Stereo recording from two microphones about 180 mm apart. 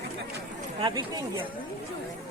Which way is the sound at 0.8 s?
25° right (ahead or behind).